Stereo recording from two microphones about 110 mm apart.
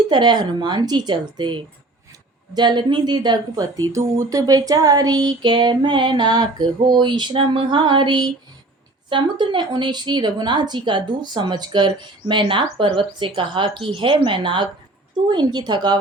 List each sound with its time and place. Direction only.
0.1 s speech: 40° right (ahead or behind)